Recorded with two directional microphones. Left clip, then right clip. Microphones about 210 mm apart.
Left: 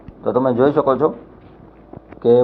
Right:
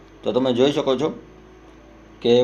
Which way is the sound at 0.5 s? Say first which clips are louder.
Left 4 dB; 5° right (ahead or behind).